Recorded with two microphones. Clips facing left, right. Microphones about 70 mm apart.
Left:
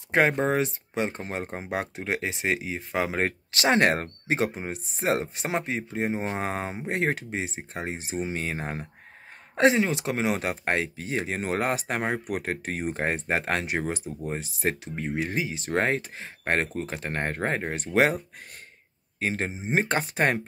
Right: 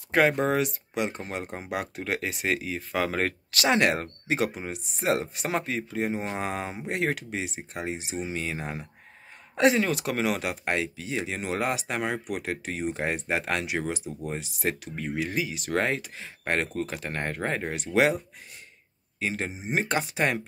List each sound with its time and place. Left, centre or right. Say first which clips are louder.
0.1 s speech: even; left
9.6 s speech: left 1 dB; left